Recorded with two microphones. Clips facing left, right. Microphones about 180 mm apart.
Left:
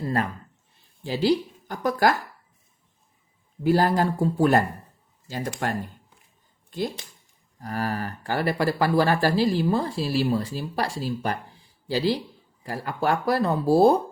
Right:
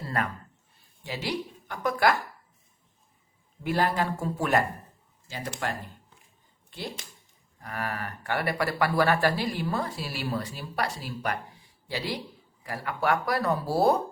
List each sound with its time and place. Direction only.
0.0 s a sound: 30° left (ahead or behind)
1.0 s speech: 30° left (ahead or behind)
3.6 s speech: 35° left (ahead or behind)
5.3 s speech: 45° left (ahead or behind); by 13.9 s 25° left (ahead or behind)